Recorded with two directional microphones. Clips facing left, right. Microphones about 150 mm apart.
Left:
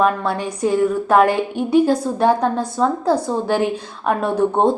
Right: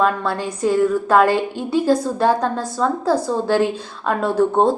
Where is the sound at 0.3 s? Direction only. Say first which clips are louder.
Even; 15° left (ahead or behind).